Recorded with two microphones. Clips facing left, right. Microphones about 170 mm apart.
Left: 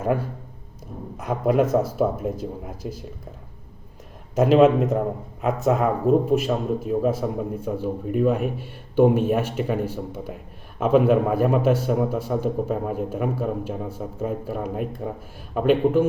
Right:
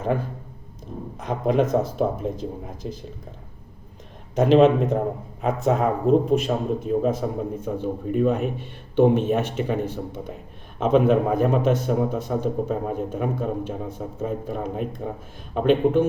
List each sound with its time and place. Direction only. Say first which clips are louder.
1.1 s a man's voice: left 1 dB; 5° left (ahead or behind)
4.4 s a man's voice: even; 5° left (ahead or behind)